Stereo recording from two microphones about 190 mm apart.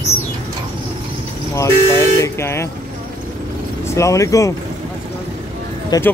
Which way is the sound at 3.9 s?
15° left (ahead or behind).